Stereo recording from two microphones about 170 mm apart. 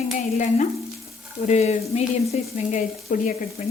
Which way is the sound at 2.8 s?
55° left (ahead or behind).